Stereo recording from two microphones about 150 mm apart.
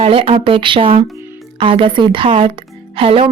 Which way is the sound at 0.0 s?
40° right (ahead or behind).